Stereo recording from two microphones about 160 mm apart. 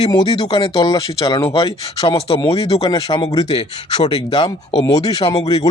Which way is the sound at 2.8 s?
25° left (ahead or behind).